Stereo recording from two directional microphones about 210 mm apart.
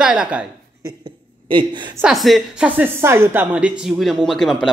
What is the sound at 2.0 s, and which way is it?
Speech, centre (ahead or behind).